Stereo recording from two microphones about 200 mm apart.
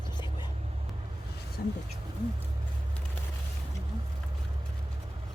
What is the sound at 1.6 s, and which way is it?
Speech, 50° left (ahead or behind).